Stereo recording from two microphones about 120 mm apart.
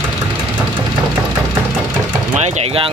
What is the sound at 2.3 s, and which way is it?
Speech, 70° right (ahead or behind).